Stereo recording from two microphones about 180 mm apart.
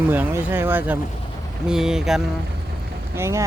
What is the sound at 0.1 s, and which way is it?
Speech, 10° right (ahead or behind).